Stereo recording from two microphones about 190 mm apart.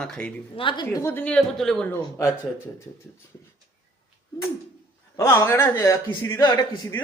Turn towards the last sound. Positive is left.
turn(degrees=15)  # may be behind; listen again after turning